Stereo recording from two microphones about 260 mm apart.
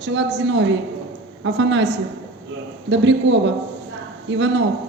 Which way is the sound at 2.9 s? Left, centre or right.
Right.